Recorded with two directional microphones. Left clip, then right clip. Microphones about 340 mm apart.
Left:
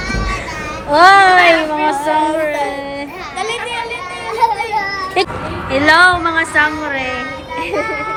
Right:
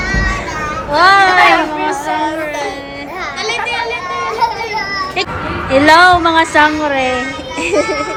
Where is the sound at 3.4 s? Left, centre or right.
Centre.